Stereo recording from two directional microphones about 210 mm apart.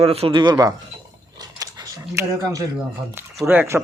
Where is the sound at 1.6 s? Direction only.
15° right (ahead or behind).